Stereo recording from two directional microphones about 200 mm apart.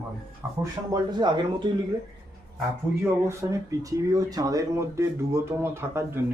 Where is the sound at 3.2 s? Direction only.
15° right (ahead or behind).